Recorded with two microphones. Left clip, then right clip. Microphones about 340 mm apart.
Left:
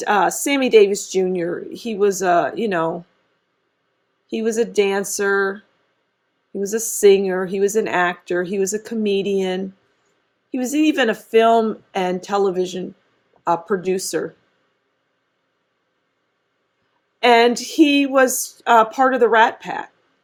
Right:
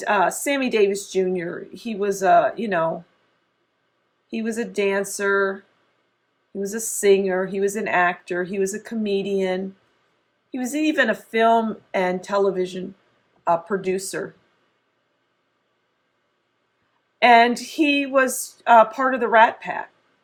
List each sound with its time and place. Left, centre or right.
0.0 s speech: left
4.3 s speech: left
6.7 s speech: left
10.7 s speech: left
17.2 s speech: left